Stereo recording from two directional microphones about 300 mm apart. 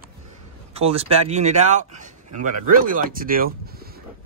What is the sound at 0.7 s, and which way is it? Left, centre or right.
Speech, centre.